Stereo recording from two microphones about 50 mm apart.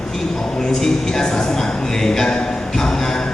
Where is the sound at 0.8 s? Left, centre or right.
Centre.